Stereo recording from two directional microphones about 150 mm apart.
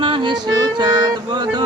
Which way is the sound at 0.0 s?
30° right (ahead or behind).